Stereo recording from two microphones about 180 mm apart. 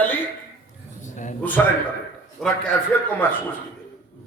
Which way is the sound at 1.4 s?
10° left (ahead or behind).